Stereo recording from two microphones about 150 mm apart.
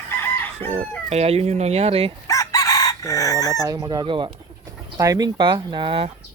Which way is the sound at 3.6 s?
25° right (ahead or behind).